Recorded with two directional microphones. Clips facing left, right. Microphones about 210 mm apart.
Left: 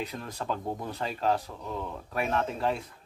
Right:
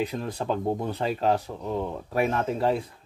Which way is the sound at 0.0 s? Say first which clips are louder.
Right 7 dB; 30° right (ahead or behind).